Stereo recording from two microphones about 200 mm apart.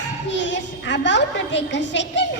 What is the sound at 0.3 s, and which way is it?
A woman's voice, 65° left (ahead or behind).